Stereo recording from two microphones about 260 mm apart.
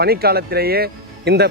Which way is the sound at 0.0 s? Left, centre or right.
Right.